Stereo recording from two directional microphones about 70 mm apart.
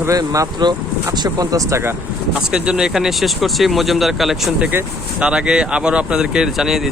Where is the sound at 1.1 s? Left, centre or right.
Right.